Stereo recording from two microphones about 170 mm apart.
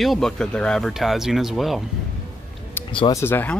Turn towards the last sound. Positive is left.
turn(degrees=10)  # may be behind; listen again after turning